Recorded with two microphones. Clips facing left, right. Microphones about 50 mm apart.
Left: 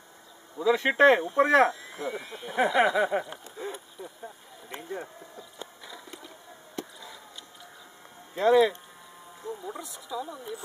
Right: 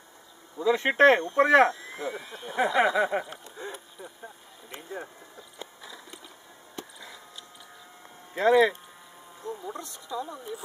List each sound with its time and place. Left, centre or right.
0.6 s speech: centre
0.9 s speech: right
1.2 s speech: centre
3.4 s a sound: centre
8.4 s speech: right
9.6 s speech: centre